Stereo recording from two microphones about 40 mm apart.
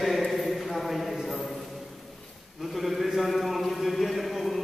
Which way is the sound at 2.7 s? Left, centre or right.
Centre.